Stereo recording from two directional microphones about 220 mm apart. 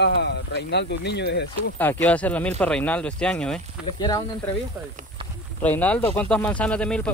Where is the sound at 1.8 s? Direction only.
10° left (ahead or behind).